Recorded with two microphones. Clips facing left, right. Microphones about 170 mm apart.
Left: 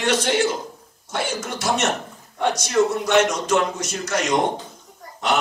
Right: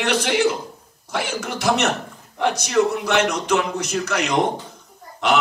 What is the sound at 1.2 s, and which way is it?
Speech, 65° right (ahead or behind).